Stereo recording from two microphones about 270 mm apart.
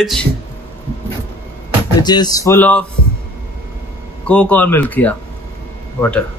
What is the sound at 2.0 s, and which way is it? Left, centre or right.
Speech, centre.